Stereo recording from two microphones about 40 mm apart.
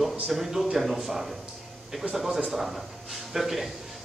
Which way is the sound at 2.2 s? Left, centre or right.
Centre.